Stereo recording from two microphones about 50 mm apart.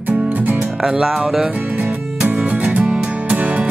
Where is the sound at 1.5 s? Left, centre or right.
Right.